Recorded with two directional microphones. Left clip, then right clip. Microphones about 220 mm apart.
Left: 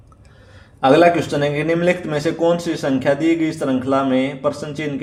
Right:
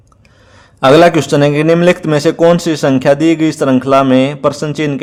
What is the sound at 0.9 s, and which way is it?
A man's voice, 35° right (ahead or behind).